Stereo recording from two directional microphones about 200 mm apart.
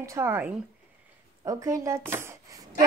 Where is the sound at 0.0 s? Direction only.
15° right (ahead or behind).